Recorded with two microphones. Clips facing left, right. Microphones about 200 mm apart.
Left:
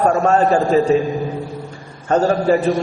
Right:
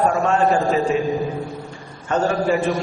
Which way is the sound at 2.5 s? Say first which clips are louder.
Left 5 dB; 40° left (ahead or behind).